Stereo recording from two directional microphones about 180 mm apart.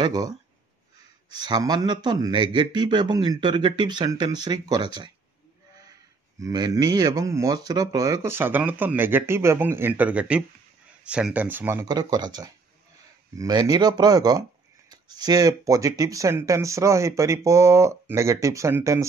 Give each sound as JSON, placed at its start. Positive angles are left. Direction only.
{"t": 0.0, "sound": "speech", "side_deg": -20}
{"t": 1.3, "sound": "speech", "side_deg": -25}
{"t": 6.4, "sound": "speech", "side_deg": -20}